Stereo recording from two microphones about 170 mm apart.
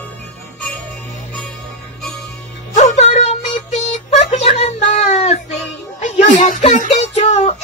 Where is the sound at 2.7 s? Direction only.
45° left (ahead or behind).